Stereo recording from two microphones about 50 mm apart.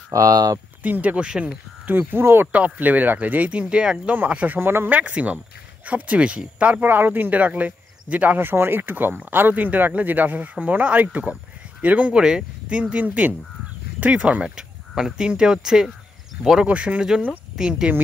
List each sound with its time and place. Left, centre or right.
0.8 s speech: right
2.5 s speech: right
4.6 s speech: right
4.8 s speech: right
8.4 s speech: right
12.2 s speech: centre
16.6 s speech: right
17.6 s speech: centre